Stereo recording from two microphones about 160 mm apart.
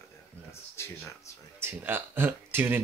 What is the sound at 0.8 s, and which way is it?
Speech, 15° left (ahead or behind).